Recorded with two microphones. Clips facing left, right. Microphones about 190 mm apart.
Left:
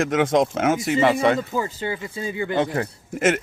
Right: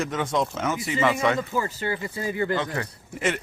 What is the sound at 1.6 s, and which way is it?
Speech, 20° left (ahead or behind).